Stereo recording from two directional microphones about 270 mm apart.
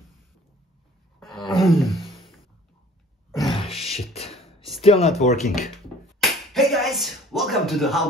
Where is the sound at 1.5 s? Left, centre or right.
Centre.